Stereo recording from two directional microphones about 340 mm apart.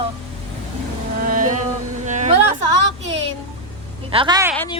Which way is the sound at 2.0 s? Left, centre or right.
Right.